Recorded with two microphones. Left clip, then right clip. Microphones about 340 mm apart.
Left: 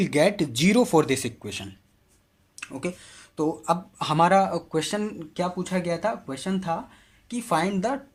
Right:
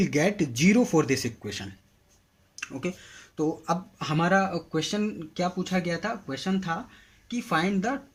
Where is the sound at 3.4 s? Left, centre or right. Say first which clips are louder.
Left 3 dB; centre.